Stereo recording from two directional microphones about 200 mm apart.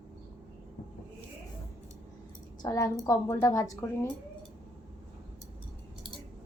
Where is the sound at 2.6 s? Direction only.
20° left (ahead or behind).